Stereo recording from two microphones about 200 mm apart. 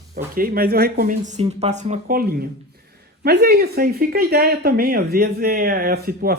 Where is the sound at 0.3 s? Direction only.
45° right (ahead or behind).